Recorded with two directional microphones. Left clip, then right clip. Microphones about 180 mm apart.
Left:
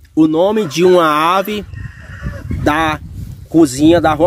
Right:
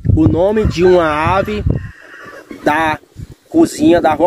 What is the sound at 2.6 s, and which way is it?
Speech, 20° left (ahead or behind).